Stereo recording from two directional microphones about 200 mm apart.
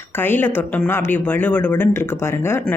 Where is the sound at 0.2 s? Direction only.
10° left (ahead or behind).